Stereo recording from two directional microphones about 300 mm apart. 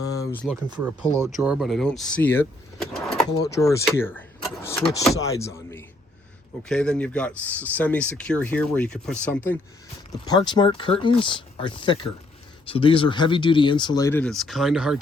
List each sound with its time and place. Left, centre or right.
0.0 s a sound: centre
1.0 s speech: centre
1.4 s speech: centre